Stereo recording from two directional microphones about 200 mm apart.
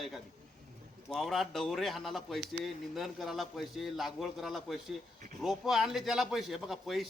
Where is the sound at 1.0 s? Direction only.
Centre (ahead or behind).